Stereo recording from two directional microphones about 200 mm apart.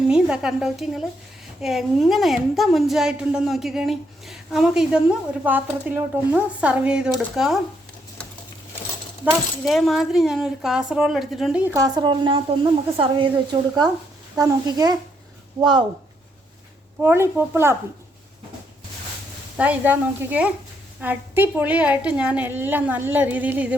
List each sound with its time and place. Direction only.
0.1 s a woman's voice: 5° right (ahead or behind)
9.6 s a woman's voice: centre (ahead or behind); by 14.9 s 20° right (ahead or behind)
17.0 s a woman's voice: 10° right (ahead or behind)
19.5 s a woman's voice: 5° right (ahead or behind)